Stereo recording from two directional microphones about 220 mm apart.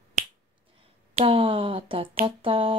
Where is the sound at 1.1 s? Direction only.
25° right (ahead or behind).